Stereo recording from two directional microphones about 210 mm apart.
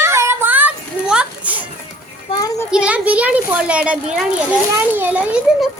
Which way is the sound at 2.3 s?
15° left (ahead or behind).